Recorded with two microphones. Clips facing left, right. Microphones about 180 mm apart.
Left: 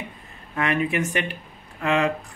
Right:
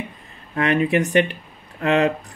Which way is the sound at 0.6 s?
35° right (ahead or behind).